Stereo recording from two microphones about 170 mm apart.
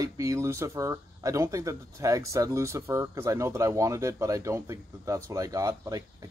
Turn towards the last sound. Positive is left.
turn(degrees=-20)  # may be behind; listen again after turning